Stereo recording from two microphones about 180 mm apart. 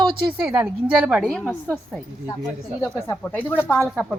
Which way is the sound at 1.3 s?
10° left (ahead or behind).